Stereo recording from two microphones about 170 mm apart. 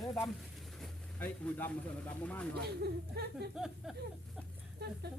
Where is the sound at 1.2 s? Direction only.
10° left (ahead or behind).